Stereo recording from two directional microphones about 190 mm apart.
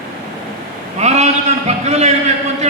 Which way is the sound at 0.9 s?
35° right (ahead or behind).